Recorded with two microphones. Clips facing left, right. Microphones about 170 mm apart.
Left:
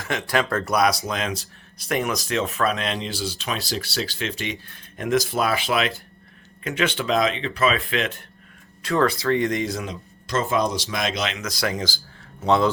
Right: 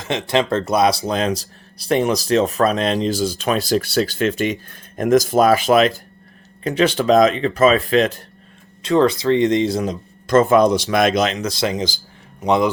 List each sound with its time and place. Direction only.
0.0 s speech: 20° right (ahead or behind); by 8.2 s 40° right (ahead or behind)
8.8 s speech: 20° right (ahead or behind)